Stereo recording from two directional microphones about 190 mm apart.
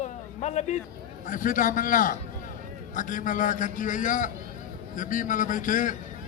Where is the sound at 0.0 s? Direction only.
35° left (ahead or behind).